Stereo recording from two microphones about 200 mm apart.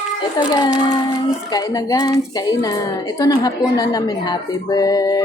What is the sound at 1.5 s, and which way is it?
A woman's voice, 20° left (ahead or behind).